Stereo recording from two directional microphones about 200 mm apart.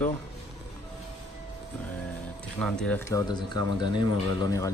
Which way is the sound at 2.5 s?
5° left (ahead or behind).